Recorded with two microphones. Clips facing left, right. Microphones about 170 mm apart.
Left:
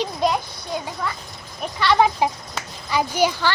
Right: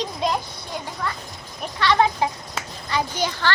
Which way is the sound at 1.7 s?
10° left (ahead or behind).